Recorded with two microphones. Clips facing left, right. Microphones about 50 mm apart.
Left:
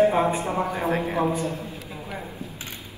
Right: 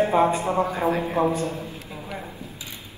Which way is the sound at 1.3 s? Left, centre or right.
Right.